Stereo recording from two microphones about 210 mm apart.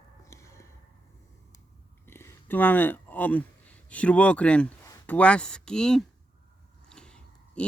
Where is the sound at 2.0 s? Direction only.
10° left (ahead or behind).